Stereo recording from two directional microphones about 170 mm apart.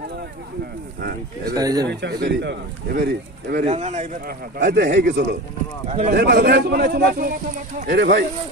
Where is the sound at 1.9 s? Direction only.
80° right.